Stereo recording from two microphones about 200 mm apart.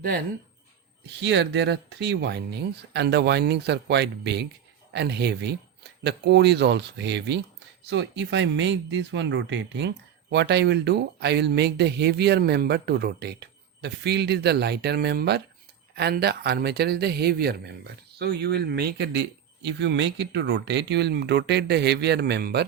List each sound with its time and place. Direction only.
1.2 s speech: 60° right (ahead or behind)